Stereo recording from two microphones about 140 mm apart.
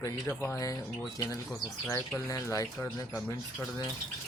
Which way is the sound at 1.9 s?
20° left (ahead or behind).